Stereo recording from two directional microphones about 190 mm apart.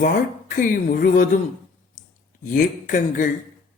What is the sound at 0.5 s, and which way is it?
Speech, 45° left (ahead or behind).